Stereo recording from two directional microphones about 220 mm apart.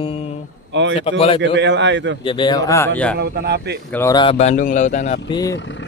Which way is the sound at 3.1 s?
45° right (ahead or behind).